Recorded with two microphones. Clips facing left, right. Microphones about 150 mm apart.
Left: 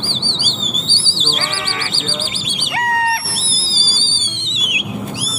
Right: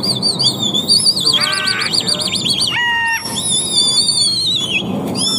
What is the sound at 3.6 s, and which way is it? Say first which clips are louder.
Music: right 4 dB; 20° right (ahead or behind).